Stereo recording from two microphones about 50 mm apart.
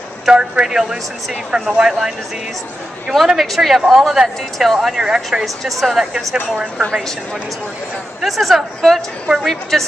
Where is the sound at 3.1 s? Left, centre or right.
Centre.